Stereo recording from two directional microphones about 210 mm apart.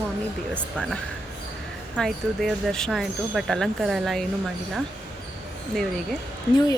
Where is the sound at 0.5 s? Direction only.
5° left (ahead or behind).